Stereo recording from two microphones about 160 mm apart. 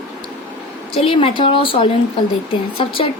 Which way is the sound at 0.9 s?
35° left (ahead or behind).